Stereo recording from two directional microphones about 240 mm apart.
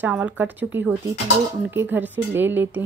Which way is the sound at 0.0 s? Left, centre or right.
Centre.